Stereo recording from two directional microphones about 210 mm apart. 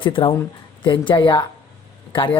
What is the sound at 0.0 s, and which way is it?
Speech, 25° left (ahead or behind).